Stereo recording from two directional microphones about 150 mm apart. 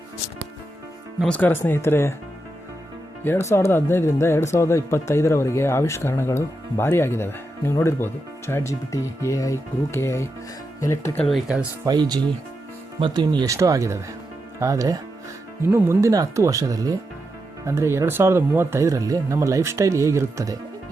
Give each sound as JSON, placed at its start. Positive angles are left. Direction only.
{"t": 1.2, "sound": "speech", "side_deg": 10}
{"t": 3.5, "sound": "speech", "side_deg": 15}
{"t": 11.9, "sound": "speech", "side_deg": -25}